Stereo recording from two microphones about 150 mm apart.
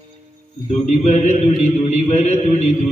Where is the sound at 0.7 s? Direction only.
50° left (ahead or behind).